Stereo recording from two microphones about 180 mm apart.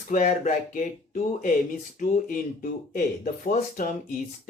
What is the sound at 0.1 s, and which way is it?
Speech, 45° left (ahead or behind).